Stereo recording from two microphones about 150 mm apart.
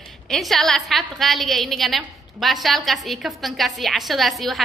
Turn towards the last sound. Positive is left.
turn(degrees=0)  # may be behind; listen again after turning